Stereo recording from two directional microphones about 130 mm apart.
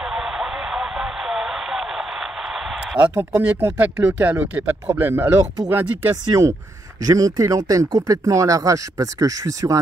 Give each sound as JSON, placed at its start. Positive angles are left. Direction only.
{"t": 0.0, "sound": "radio", "side_deg": -5}
{"t": 3.6, "sound": "speech", "side_deg": -15}